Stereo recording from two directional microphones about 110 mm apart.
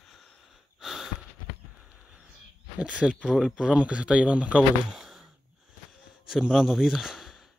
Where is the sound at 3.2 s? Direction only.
Centre (ahead or behind).